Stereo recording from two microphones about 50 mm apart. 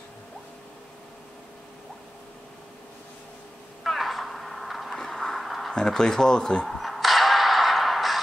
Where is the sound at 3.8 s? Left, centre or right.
Centre.